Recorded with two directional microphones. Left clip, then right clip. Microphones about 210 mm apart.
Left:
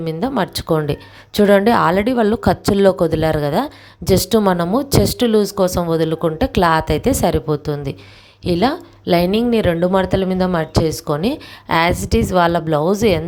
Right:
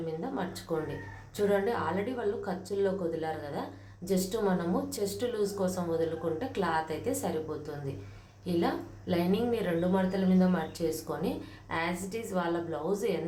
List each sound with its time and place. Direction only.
0.2 s speech: 50° left (ahead or behind)